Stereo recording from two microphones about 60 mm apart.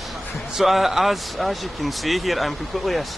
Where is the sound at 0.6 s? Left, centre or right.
Centre.